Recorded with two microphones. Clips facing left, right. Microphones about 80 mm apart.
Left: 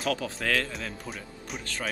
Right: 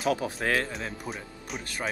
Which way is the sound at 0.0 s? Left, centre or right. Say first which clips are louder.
Right 2 dB; right.